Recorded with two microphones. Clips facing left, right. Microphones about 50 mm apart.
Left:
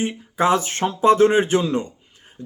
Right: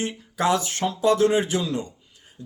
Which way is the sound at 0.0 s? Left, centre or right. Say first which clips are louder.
Left 4 dB; left.